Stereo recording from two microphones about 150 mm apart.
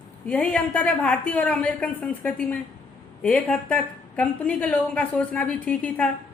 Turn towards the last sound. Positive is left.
turn(degrees=5)  # may be behind; listen again after turning